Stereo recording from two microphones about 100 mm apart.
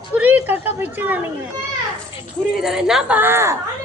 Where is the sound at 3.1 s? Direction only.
25° right (ahead or behind).